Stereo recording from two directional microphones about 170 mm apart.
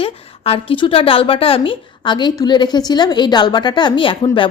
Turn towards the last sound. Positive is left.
turn(degrees=30)  # may be behind; listen again after turning